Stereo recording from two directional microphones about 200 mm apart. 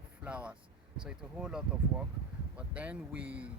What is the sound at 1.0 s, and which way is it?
Speech, 5° right (ahead or behind).